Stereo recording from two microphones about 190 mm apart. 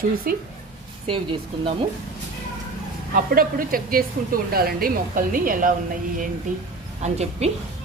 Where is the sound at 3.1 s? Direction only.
50° right (ahead or behind).